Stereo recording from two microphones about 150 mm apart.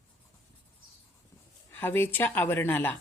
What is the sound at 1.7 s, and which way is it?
A woman's voice, 15° left (ahead or behind).